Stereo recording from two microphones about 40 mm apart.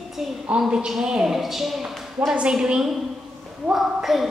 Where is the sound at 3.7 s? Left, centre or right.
Centre.